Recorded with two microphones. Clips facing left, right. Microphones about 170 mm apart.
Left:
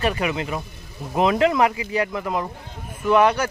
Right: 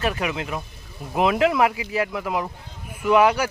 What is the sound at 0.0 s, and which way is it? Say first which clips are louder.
Speech: left 2 dB; centre (ahead or behind).